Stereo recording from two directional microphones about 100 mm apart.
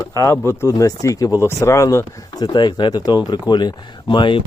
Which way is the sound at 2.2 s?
45° left (ahead or behind).